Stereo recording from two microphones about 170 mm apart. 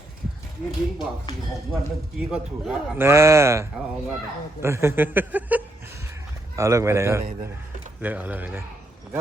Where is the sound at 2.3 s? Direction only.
10° right (ahead or behind).